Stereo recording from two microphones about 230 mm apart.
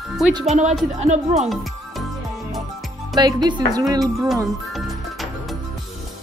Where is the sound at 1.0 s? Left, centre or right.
Right.